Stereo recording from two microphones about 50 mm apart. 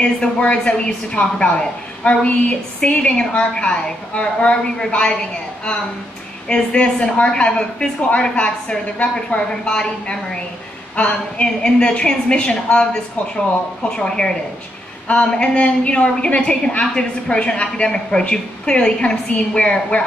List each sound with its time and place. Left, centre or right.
0.0 s a woman's voice: left
6.5 s a woman's voice: left